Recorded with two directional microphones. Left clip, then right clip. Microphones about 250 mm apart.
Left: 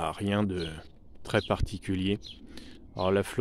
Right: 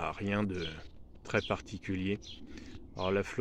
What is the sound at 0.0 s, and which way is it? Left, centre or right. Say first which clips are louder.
Speech: left 4 dB; left.